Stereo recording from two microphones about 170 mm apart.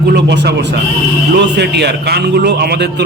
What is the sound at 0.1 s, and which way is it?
Speech, 80° right.